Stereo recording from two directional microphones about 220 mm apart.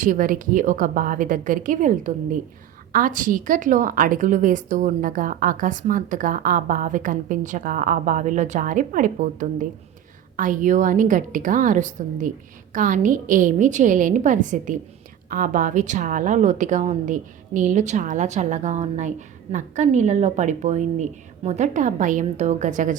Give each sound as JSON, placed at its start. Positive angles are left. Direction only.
{"t": 0.0, "sound": "a woman's voice", "side_deg": -40}